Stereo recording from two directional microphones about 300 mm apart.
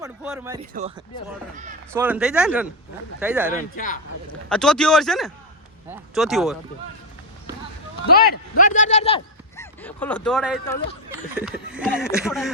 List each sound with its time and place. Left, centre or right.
0.0 s a sound: centre
0.7 s speech: right
1.9 s speech: centre
3.8 s a man's voice: left
4.4 s speech: centre
8.1 s a man's voice: left
9.6 s speech: centre